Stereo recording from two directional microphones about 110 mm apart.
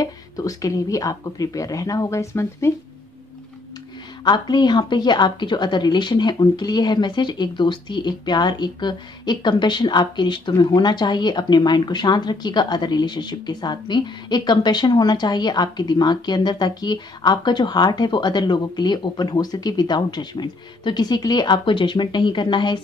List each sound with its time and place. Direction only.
0.0 s a woman's voice: 30° left (ahead or behind)
4.2 s a woman's voice: 40° left (ahead or behind)